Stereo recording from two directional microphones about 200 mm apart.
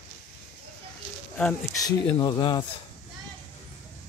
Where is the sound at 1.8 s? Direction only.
25° left (ahead or behind).